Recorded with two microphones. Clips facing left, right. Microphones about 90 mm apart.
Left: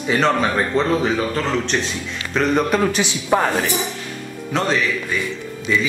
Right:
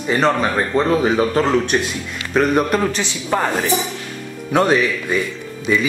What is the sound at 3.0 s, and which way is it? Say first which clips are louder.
Speech: left 2 dB; 10° left (ahead or behind).